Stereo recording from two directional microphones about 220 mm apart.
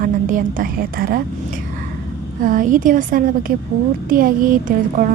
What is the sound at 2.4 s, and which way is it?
A woman's voice, 35° right (ahead or behind).